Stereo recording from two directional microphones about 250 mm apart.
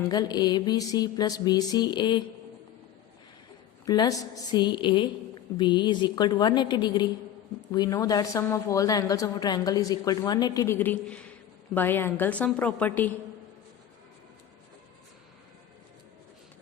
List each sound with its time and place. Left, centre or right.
0.1 s a woman's voice: centre
3.8 s a woman's voice: centre